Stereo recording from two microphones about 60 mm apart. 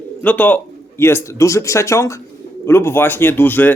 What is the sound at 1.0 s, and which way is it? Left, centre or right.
Speech, left.